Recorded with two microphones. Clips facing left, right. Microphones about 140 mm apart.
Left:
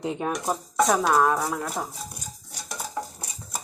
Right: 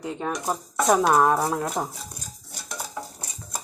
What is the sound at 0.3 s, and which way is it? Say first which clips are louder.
Speech: even; centre (ahead or behind).